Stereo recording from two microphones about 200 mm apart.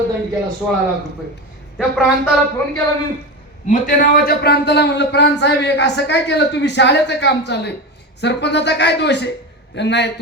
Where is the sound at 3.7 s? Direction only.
45° left (ahead or behind).